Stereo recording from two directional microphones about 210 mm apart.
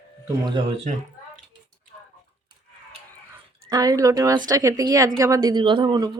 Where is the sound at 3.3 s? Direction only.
15° right (ahead or behind).